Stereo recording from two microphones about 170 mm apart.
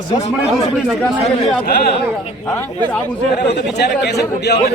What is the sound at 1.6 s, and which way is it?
Speech, 65° left (ahead or behind).